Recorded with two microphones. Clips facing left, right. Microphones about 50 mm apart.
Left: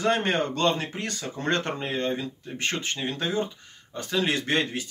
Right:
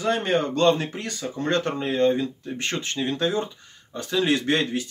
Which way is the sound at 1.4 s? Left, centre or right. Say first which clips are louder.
Right 3 dB; left.